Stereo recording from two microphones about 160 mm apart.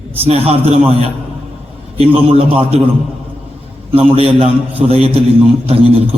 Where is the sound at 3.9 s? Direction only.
35° right (ahead or behind).